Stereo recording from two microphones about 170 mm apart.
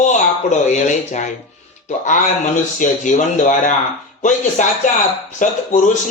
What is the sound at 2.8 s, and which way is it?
Speech, 50° left (ahead or behind).